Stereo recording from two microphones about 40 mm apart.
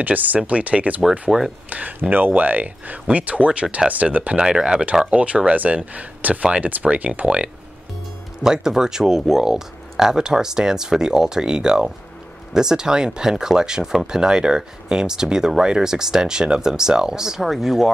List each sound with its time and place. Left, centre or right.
0.0 s speech: right
1.3 s speech: centre
1.7 s speech: right
2.0 s speech: right
4.4 s speech: right
5.1 s speech: right
7.2 s speech: right
8.4 s speech: centre